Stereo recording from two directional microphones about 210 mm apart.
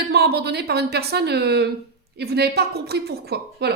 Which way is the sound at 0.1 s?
50° right (ahead or behind).